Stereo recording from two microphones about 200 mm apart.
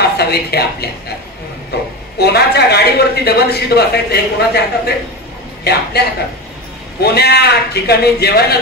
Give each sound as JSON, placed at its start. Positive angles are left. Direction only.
{"t": 0.2, "sound": "a man's voice", "side_deg": 55}
{"t": 2.1, "sound": "a man's voice", "side_deg": 55}